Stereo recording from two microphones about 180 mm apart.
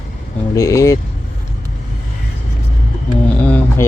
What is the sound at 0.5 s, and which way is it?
Speech, 15° left (ahead or behind).